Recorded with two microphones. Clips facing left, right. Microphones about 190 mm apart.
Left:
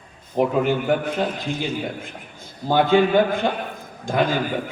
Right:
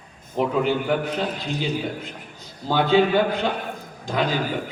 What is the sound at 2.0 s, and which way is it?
A man's voice, 50° left (ahead or behind).